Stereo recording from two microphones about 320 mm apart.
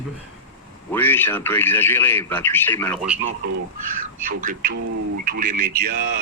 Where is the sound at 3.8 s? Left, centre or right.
Right.